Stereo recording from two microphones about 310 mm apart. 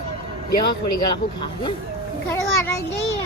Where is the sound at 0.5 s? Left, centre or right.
Left.